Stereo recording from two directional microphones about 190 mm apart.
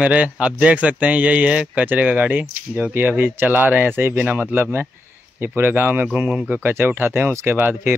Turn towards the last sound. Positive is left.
turn(degrees=-10)  # may be behind; listen again after turning